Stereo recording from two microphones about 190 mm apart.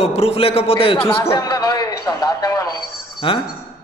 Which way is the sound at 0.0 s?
30° left (ahead or behind).